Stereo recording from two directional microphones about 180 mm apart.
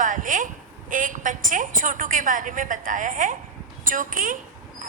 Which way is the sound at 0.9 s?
45° right (ahead or behind).